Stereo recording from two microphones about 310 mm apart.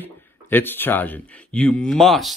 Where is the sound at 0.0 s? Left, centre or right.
Centre.